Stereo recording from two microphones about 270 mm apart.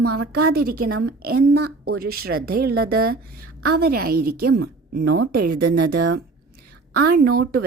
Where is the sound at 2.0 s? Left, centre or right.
Right.